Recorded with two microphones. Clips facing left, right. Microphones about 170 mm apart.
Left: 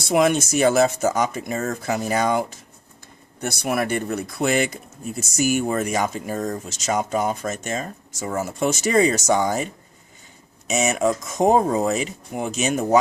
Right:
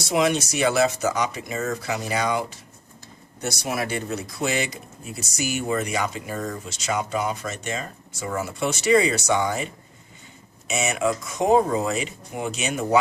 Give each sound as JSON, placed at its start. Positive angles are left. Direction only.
{"t": 0.0, "sound": "speech", "side_deg": 50}
{"t": 10.7, "sound": "speech", "side_deg": 40}